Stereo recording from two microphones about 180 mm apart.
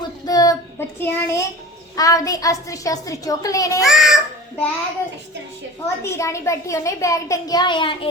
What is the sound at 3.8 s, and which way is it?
Child singing, centre (ahead or behind).